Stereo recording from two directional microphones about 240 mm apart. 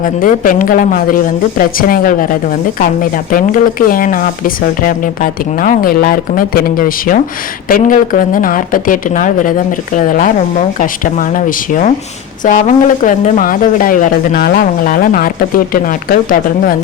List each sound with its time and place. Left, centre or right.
0.0 s speech: left